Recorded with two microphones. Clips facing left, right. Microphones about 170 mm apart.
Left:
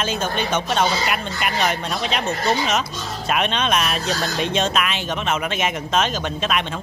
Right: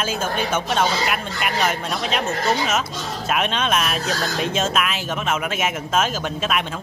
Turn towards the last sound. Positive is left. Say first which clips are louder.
# even
turn(degrees=-5)  # may be behind; listen again after turning